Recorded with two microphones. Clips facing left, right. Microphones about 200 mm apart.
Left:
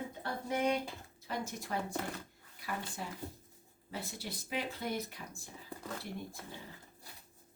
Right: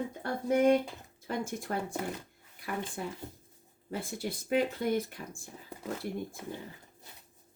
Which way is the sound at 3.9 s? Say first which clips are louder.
Right 7 dB; 50° right (ahead or behind).